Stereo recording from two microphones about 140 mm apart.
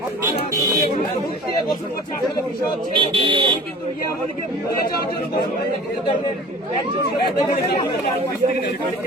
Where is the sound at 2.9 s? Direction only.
35° right (ahead or behind).